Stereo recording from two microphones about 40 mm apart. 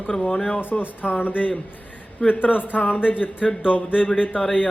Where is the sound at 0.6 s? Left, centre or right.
Left.